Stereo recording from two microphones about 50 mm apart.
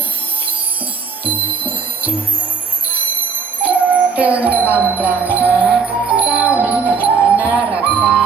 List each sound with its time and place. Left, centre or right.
1.2 s music: right
3.6 s music: right